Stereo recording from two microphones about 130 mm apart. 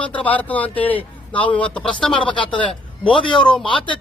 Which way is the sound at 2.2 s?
40° left (ahead or behind).